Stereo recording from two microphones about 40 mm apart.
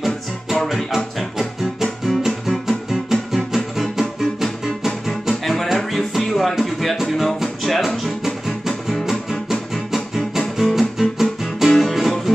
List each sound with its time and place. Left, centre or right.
0.0 s music: centre